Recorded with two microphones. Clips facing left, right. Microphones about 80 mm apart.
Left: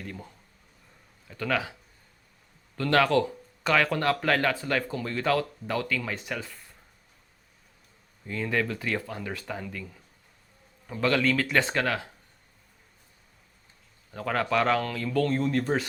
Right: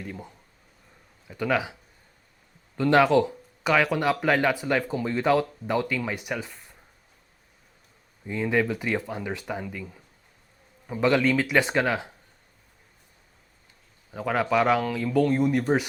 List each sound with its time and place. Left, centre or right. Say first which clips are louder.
0.0 s speech: right 2 dB; centre
2.7 s speech: right 4 dB; centre
8.3 s speech: right 4 dB; centre
14.1 s speech: right 3 dB; centre